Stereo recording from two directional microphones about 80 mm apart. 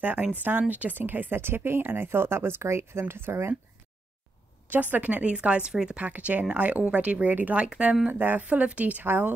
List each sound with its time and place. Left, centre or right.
0.0 s speech: right
4.6 s speech: right
8.1 s speech: right